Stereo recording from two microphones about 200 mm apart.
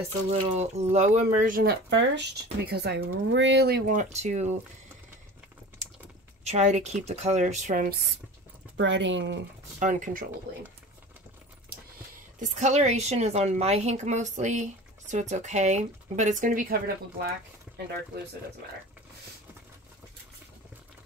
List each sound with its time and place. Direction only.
0.3 s a woman's voice: 35° right (ahead or behind)
6.4 s a woman's voice: 35° right (ahead or behind)
8.7 s speech: 65° right (ahead or behind)
9.8 s a woman's voice: 40° right (ahead or behind)
12.4 s a woman's voice: 35° right (ahead or behind)